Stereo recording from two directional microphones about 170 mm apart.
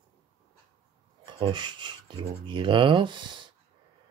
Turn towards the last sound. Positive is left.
turn(degrees=-30)  # may be behind; listen again after turning